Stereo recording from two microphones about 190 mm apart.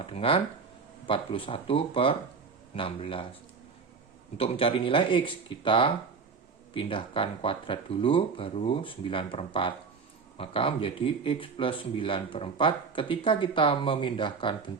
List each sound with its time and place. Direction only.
0.0 s speech: 30° left (ahead or behind)
4.4 s speech: 30° left (ahead or behind)